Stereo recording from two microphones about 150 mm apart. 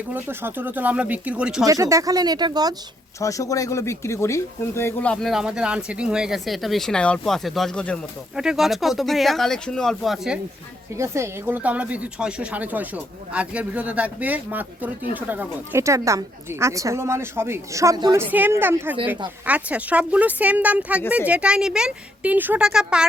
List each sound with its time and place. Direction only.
0.1 s speech: 15° right (ahead or behind)
1.6 s speech: 20° right (ahead or behind)
3.2 s speech: 20° left (ahead or behind); by 10.4 s 5° right (ahead or behind)
10.9 s speech: 20° right (ahead or behind)